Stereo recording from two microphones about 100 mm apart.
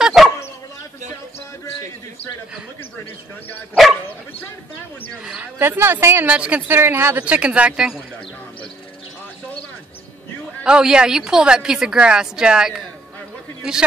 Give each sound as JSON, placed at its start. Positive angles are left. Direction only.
{"t": 0.0, "sound": "dog", "side_deg": -5}
{"t": 5.2, "sound": "a woman's voice", "side_deg": -10}
{"t": 5.6, "sound": "speech", "side_deg": -25}
{"t": 6.3, "sound": "a woman's voice", "side_deg": -10}
{"t": 6.7, "sound": "a woman's voice", "side_deg": -25}
{"t": 10.6, "sound": "a woman's voice", "side_deg": -5}